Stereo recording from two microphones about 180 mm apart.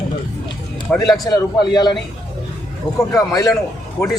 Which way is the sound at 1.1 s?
20° left (ahead or behind).